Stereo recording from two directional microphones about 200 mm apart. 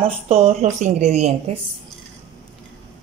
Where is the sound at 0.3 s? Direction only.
30° right (ahead or behind).